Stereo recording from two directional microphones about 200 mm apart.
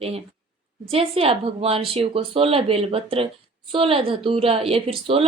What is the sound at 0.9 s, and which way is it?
A woman's voice, 30° right (ahead or behind).